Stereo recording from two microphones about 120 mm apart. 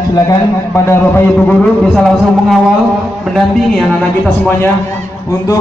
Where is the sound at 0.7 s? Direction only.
20° left (ahead or behind).